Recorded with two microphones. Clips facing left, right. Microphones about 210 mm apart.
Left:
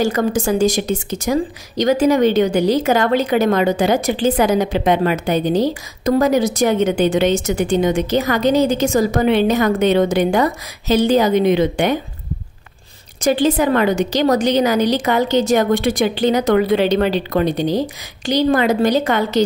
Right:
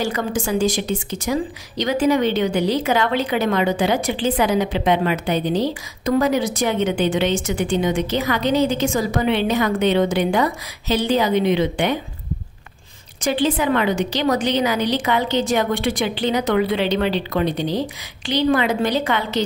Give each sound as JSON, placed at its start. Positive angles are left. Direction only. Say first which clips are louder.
{"t": 0.0, "sound": "a woman's voice", "louder": "left 5 dB", "side_deg": 40}
{"t": 13.2, "sound": "a woman's voice", "louder": "left 4 dB", "side_deg": 40}